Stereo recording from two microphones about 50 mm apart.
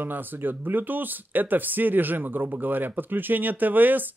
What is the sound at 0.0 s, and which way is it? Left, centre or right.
Speech, right.